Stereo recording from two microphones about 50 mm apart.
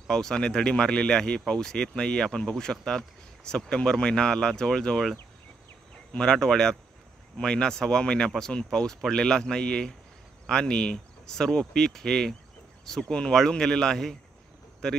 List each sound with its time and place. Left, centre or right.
0.1 s speech: centre
6.1 s speech: centre